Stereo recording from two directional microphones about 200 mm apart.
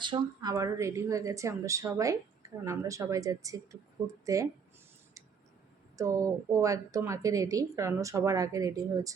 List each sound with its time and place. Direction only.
0.0 s a woman's voice: 20° right (ahead or behind)
6.0 s a woman's voice: 15° right (ahead or behind)